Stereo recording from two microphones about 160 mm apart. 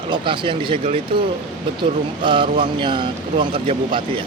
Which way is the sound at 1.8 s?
30° right (ahead or behind).